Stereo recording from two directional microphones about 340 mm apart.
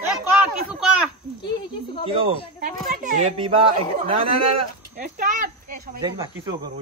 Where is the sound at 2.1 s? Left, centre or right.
Centre.